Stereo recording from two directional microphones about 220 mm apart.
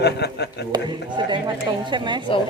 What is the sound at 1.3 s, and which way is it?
Speech, 20° right (ahead or behind).